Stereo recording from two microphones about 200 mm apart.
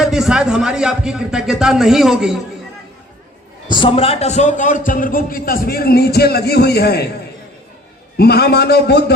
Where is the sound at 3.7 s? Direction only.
25° left (ahead or behind); by 7.1 s 55° left (ahead or behind).